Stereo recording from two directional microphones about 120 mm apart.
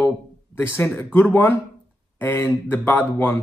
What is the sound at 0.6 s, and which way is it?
Speech, 20° left (ahead or behind).